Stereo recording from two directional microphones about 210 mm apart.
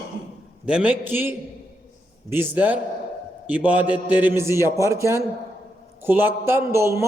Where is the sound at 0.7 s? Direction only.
5° right (ahead or behind).